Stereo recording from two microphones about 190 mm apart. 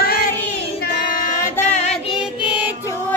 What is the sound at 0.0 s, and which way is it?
Child singing, 50° left (ahead or behind).